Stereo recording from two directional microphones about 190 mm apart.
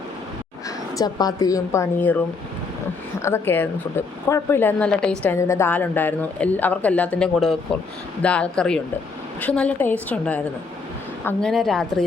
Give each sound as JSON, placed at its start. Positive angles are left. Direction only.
{"t": 0.9, "sound": "a woman's voice", "side_deg": 20}
{"t": 3.2, "sound": "a woman's voice", "side_deg": 15}